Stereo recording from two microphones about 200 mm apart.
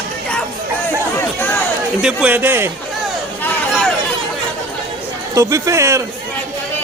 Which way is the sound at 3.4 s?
5° left (ahead or behind).